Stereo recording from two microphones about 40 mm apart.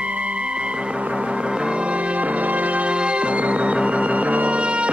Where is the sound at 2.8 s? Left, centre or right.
Right.